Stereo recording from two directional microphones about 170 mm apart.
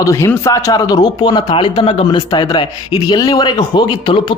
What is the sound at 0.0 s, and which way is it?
Speech, 15° left (ahead or behind).